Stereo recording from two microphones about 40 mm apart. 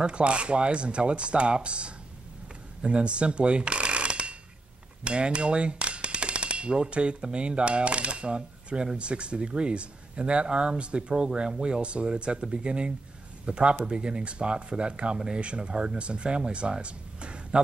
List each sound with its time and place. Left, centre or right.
0.0 s speech: right
2.8 s a sound: right
5.0 s speech: right